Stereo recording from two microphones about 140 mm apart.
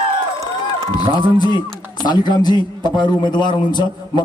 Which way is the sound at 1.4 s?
30° left (ahead or behind).